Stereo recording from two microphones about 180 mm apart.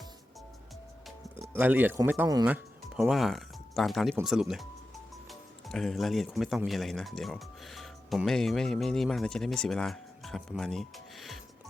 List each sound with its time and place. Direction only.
1.4 s speech: 10° right (ahead or behind)